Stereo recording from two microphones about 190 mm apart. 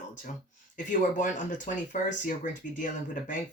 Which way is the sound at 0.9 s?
40° left (ahead or behind).